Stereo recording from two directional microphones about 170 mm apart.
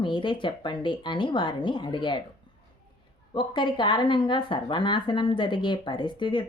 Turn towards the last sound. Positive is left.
turn(degrees=30)  # may be behind; listen again after turning